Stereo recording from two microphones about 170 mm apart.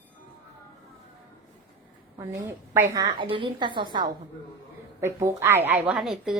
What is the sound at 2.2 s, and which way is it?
A woman's voice, 15° right (ahead or behind).